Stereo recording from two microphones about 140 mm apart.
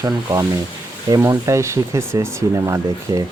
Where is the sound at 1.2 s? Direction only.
20° right (ahead or behind).